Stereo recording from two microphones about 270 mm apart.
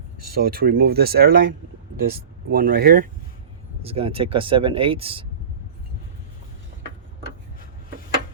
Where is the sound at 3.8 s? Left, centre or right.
Right.